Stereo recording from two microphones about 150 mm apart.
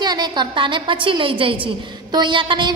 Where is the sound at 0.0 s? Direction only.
30° right (ahead or behind).